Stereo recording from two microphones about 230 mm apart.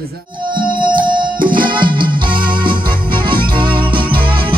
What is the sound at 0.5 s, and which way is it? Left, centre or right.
Music, right.